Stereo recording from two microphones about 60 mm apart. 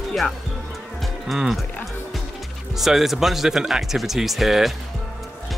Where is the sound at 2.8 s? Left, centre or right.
Centre.